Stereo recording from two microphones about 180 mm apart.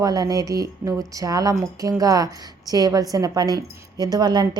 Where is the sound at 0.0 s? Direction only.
20° right (ahead or behind).